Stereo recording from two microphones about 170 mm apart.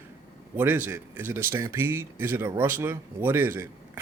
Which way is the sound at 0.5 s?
10° right (ahead or behind).